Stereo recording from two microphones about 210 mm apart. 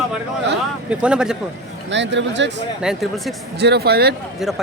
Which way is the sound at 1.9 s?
55° right (ahead or behind).